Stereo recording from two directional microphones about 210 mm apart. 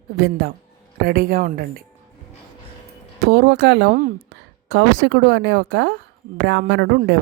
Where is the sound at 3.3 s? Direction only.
55° right (ahead or behind).